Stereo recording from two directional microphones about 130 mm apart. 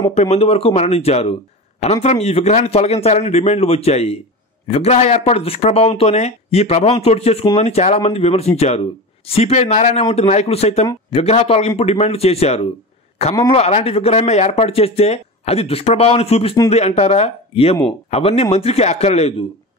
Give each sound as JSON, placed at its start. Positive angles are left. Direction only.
{"t": 0.0, "sound": "speech", "side_deg": 55}